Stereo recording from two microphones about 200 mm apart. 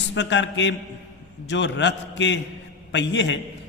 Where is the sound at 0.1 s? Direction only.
65° left (ahead or behind).